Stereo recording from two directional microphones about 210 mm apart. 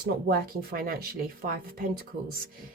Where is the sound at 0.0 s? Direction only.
45° right (ahead or behind).